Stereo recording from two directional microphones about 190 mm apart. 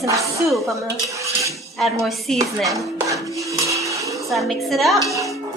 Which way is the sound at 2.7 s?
15° right (ahead or behind).